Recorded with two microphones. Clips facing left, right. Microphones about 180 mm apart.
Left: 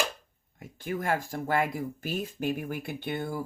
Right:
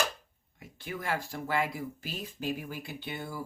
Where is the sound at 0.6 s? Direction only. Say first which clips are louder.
Left 6 dB; 45° left (ahead or behind).